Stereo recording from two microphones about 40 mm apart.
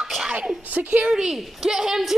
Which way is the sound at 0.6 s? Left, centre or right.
Right.